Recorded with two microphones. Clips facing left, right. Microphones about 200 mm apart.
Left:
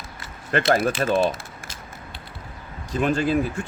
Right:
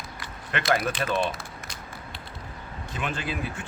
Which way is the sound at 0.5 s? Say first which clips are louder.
Left 6 dB; 40° left (ahead or behind).